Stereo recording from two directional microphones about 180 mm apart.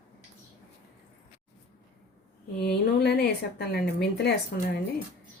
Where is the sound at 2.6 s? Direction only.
60° left (ahead or behind).